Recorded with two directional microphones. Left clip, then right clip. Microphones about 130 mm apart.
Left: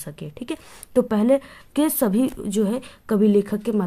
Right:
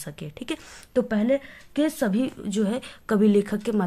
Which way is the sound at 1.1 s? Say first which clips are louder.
Left 4 dB; 55° left (ahead or behind).